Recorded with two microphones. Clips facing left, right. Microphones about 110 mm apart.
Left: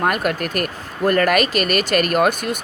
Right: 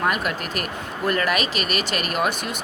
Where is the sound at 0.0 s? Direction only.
50° left (ahead or behind).